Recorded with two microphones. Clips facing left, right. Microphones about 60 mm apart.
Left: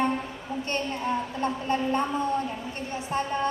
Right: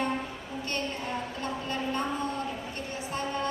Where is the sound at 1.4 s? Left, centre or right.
Left.